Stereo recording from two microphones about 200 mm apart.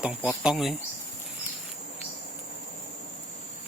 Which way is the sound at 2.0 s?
35° left (ahead or behind).